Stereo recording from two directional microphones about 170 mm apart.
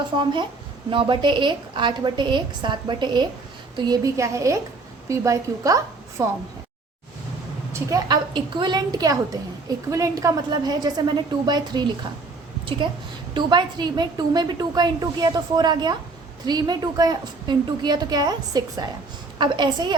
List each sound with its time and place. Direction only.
0.0 s a woman's voice: 30° right (ahead or behind)
7.7 s a woman's voice: 20° right (ahead or behind)
13.3 s a woman's voice: 25° right (ahead or behind)